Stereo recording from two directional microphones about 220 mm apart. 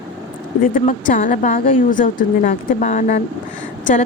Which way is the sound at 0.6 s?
40° left (ahead or behind).